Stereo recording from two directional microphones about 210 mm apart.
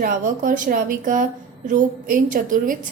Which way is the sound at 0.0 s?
40° right (ahead or behind).